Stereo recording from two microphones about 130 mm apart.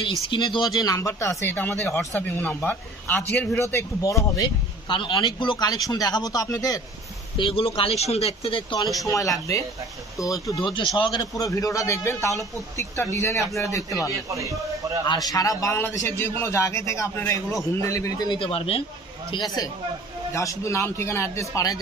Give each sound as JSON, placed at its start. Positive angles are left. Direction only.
{"t": 0.3, "sound": "speech", "side_deg": 35}
{"t": 7.3, "sound": "speech", "side_deg": 40}
{"t": 8.9, "sound": "speech", "side_deg": 25}
{"t": 10.6, "sound": "speech", "side_deg": 40}
{"t": 14.3, "sound": "speech", "side_deg": -25}
{"t": 15.0, "sound": "speech", "side_deg": 30}
{"t": 18.4, "sound": "speech", "side_deg": 45}
{"t": 19.3, "sound": "speech", "side_deg": 30}